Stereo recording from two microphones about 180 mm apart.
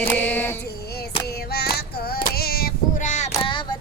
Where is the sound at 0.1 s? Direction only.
10° left (ahead or behind).